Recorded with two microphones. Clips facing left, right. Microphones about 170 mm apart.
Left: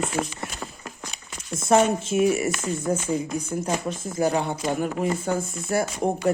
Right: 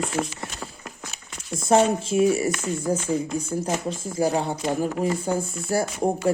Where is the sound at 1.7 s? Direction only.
30° right (ahead or behind).